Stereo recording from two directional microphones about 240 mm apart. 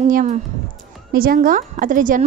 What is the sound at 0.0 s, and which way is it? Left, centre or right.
A woman's voice, right.